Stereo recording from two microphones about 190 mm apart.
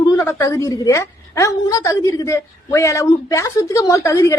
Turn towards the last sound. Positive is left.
turn(degrees=15)  # may be behind; listen again after turning